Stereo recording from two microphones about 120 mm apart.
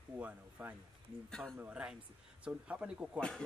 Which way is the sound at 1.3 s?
5° left (ahead or behind).